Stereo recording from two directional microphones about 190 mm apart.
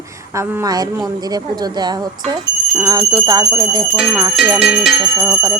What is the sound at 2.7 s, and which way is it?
Speech, 15° right (ahead or behind).